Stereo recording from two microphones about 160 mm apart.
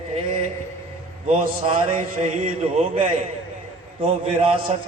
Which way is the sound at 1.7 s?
40° right (ahead or behind).